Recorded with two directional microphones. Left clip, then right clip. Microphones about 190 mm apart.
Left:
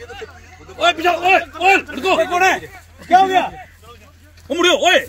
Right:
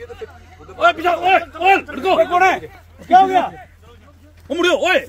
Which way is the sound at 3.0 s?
10° left (ahead or behind).